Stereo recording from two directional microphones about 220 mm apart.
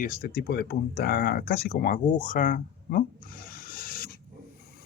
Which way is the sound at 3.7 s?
40° left (ahead or behind).